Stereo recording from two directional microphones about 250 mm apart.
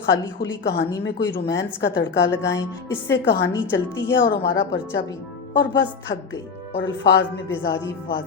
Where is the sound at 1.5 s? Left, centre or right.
Left.